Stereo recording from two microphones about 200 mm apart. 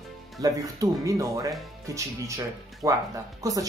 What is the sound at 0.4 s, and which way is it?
Speech, 15° right (ahead or behind).